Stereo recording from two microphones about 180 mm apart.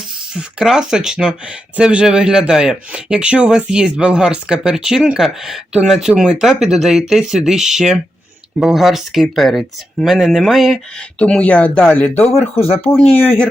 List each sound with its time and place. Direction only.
0.3 s speech: 5° right (ahead or behind)
12.5 s speech: 35° left (ahead or behind)
12.9 s speech: 10° left (ahead or behind)